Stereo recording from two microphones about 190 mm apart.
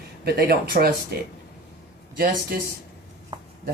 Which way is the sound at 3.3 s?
25° right (ahead or behind).